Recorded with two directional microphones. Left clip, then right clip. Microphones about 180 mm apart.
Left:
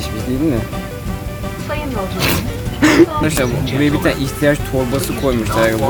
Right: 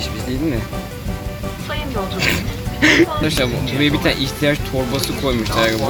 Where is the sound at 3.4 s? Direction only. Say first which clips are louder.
Left 1 dB; centre (ahead or behind).